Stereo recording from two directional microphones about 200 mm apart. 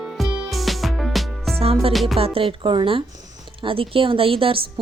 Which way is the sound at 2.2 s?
30° right (ahead or behind).